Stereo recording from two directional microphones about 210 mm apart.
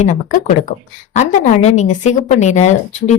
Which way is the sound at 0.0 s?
35° left (ahead or behind).